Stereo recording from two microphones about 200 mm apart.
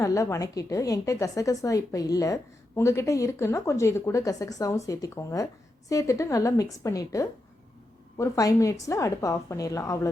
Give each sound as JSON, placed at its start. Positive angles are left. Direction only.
{"t": 0.0, "sound": "a woman's voice", "side_deg": 15}